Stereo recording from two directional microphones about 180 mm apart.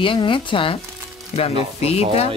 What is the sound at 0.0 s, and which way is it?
Speech, 30° left (ahead or behind).